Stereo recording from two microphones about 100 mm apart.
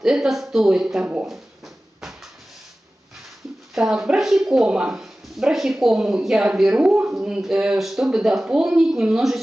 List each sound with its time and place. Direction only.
0.0 s speech: 5° right (ahead or behind)
3.7 s speech: 5° right (ahead or behind)